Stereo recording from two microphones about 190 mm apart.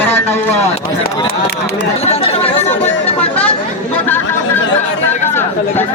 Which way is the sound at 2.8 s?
10° left (ahead or behind).